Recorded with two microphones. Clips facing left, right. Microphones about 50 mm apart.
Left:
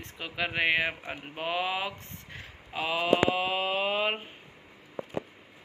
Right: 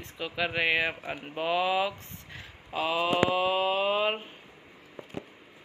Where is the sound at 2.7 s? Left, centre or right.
Centre.